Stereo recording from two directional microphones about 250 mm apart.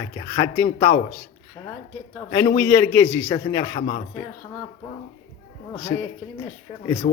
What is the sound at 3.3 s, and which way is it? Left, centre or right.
Speech, left.